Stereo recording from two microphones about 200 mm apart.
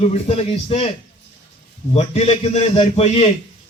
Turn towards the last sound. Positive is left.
turn(degrees=30)  # may be behind; listen again after turning